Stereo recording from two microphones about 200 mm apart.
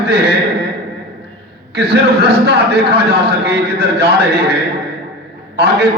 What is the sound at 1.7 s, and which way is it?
A man's voice, 55° right (ahead or behind).